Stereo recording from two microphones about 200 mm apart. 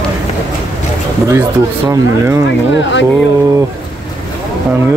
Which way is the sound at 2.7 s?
65° left (ahead or behind).